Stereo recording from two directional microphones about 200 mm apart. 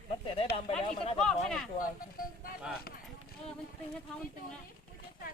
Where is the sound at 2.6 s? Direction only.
5° right (ahead or behind).